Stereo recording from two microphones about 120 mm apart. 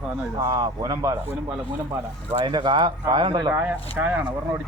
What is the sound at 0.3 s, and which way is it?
Speech, 30° right (ahead or behind).